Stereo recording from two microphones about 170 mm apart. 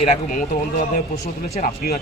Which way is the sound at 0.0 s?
45° left (ahead or behind).